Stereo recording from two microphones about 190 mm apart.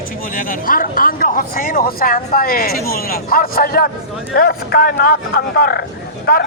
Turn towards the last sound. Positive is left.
turn(degrees=55)  # may be behind; listen again after turning